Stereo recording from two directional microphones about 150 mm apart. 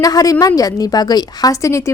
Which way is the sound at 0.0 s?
25° left (ahead or behind).